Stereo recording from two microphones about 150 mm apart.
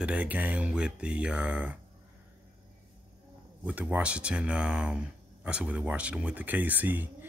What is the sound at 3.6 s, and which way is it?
Speech, 10° right (ahead or behind).